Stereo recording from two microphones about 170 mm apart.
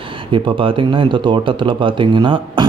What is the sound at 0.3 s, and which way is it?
A man's voice, 30° right (ahead or behind).